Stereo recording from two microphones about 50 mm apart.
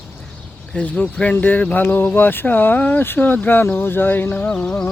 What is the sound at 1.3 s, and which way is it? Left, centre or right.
Speech, left.